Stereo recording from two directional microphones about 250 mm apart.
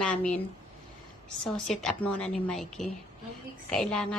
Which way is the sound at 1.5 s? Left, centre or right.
Centre.